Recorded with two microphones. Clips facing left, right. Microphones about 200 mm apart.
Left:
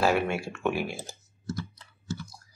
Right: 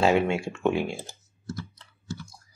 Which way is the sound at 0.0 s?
20° right (ahead or behind).